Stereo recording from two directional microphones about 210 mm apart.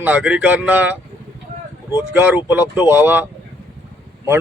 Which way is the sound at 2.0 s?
10° right (ahead or behind).